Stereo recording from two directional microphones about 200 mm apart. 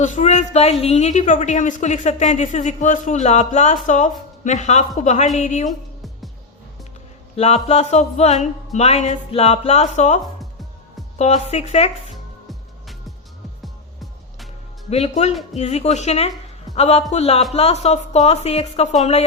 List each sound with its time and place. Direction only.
0.0 s a woman's voice: 40° left (ahead or behind)
7.3 s a woman's voice: 30° left (ahead or behind)
11.2 s a woman's voice: 30° left (ahead or behind)
12.1 s music: centre (ahead or behind)
14.8 s a woman's voice: 30° left (ahead or behind)